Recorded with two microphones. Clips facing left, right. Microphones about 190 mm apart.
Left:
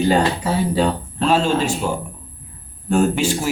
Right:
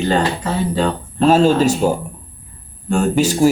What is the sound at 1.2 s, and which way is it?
Speech, 40° right (ahead or behind).